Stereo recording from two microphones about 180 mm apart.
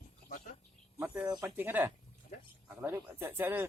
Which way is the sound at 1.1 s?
20° right (ahead or behind).